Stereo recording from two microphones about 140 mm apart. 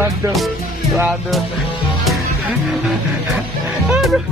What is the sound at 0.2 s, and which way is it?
Speech, 25° right (ahead or behind).